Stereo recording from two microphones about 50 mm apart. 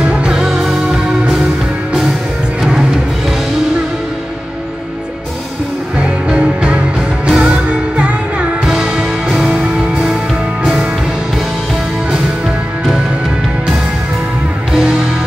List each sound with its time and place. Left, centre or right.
0.1 s music: right
0.4 s music: centre
2.6 s music: centre
5.9 s music: right
9.6 s music: right
14.7 s music: centre